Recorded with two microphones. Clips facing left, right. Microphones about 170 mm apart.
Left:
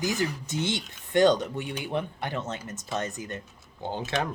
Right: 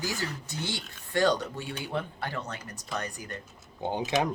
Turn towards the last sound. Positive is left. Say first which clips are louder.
# right 2 dB
turn(degrees=-15)  # may be behind; listen again after turning